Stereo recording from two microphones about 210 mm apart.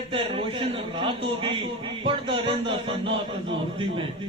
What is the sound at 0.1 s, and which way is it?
A man's voice, 25° right (ahead or behind).